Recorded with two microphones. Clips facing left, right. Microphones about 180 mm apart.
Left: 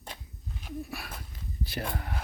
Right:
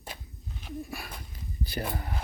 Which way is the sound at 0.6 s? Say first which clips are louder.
Even; 5° left (ahead or behind).